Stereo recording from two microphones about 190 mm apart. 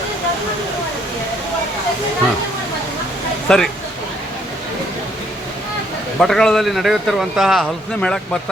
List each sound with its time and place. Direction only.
3.5 s speech: 5° left (ahead or behind)
6.1 s speech: centre (ahead or behind)